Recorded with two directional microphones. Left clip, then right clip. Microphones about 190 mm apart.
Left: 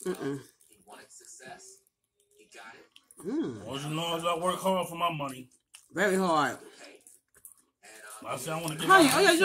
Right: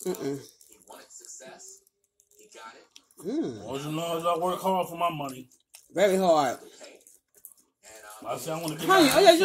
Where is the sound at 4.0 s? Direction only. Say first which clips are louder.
Right 3 dB; 30° left (ahead or behind).